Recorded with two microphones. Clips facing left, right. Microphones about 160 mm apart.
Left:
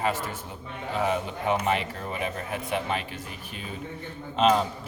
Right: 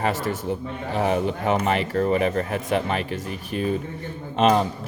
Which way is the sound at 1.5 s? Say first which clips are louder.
Right 5 dB; 65° right (ahead or behind).